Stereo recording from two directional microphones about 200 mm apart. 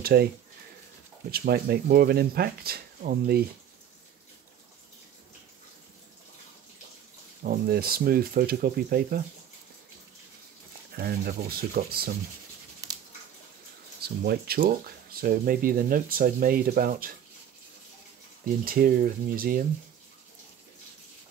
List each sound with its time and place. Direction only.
0.0 s speech: 50° right (ahead or behind)
1.3 s speech: 50° right (ahead or behind)
7.4 s speech: 50° right (ahead or behind)
11.0 s speech: 50° right (ahead or behind)
14.0 s speech: 50° right (ahead or behind)
18.6 s speech: 45° right (ahead or behind)